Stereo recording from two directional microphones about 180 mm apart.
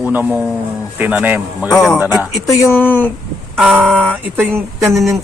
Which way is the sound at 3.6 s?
5° right (ahead or behind).